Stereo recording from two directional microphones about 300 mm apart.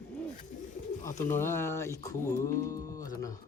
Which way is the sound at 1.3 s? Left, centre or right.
Centre.